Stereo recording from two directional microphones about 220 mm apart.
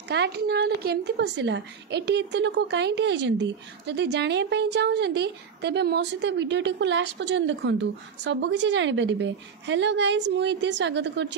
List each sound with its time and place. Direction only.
0.1 s a woman's voice: 50° right (ahead or behind)